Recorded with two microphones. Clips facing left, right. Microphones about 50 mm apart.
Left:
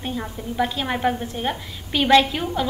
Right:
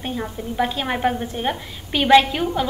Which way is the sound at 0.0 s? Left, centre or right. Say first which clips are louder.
Right 2 dB; centre.